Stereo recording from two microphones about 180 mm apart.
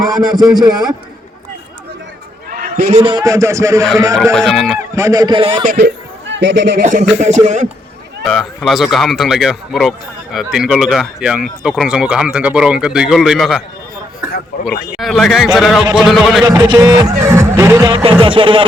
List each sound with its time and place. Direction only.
0.6 s speech: 20° right (ahead or behind)
2.5 s a sound: 60° right (ahead or behind)
2.9 s a man's voice: 30° right (ahead or behind)
4.4 s speech: 5° left (ahead or behind)
4.9 s speech: 20° right (ahead or behind)
5.6 s speech: 60° right (ahead or behind)
7.2 s speech: 40° right (ahead or behind)
8.2 s a man's voice: centre (ahead or behind)
16.4 s speech: 20° right (ahead or behind)